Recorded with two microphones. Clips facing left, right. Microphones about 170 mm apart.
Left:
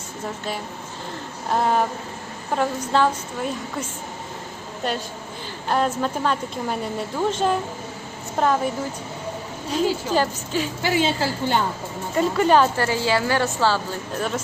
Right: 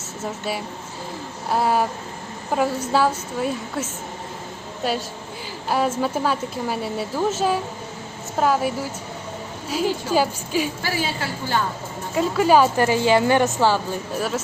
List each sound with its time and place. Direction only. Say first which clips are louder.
1.5 s a woman's voice: even; 5° right (ahead or behind)
10.8 s a woman's voice: left 4 dB; 25° left (ahead or behind)
12.1 s a woman's voice: right 1 dB; centre (ahead or behind)